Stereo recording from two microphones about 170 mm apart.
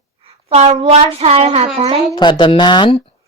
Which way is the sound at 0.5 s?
40° right (ahead or behind).